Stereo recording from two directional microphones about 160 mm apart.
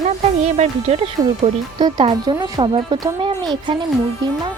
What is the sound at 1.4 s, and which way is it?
Speech, 30° right (ahead or behind).